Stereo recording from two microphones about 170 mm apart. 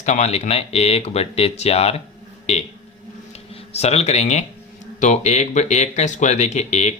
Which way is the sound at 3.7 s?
40° left (ahead or behind).